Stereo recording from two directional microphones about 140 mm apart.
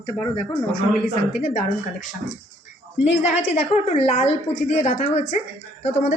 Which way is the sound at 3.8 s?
50° left (ahead or behind).